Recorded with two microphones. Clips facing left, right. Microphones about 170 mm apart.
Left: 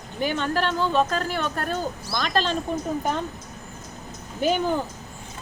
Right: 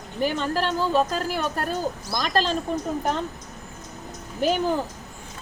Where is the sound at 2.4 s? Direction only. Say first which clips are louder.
Right 1 dB; 35° right (ahead or behind).